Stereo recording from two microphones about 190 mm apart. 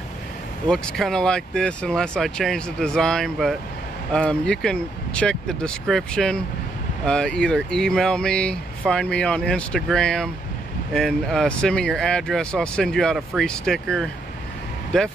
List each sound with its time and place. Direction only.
0.7 s speech: centre (ahead or behind)